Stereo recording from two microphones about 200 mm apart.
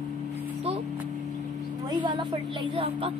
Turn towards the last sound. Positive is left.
turn(degrees=-25)  # may be behind; listen again after turning